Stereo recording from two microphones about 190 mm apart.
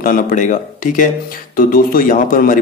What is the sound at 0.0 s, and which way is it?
A man's voice, 45° left (ahead or behind).